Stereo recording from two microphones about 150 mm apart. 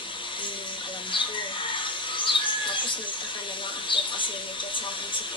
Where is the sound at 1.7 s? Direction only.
35° left (ahead or behind).